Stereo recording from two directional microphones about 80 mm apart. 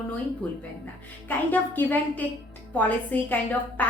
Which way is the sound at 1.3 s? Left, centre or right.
Left.